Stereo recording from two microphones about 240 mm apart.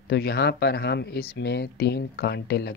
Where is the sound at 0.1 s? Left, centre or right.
Left.